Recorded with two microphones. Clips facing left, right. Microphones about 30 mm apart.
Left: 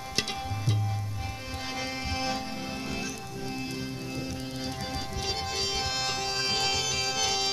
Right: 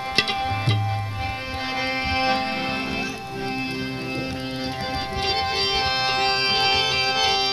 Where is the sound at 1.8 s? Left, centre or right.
Right.